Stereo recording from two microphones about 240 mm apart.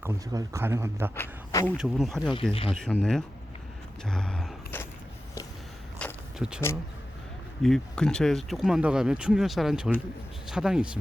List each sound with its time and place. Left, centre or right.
0.0 s speech: centre
1.1 s a man's voice: centre
2.3 s speech: left
2.6 s speech: centre
4.0 s a sound: centre
6.0 s walk: centre
7.6 s speech: centre